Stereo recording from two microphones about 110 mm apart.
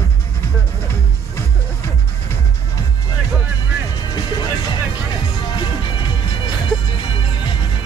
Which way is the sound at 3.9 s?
40° left (ahead or behind).